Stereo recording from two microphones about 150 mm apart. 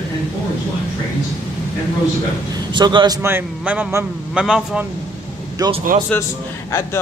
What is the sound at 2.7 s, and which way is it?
Speech, 30° right (ahead or behind).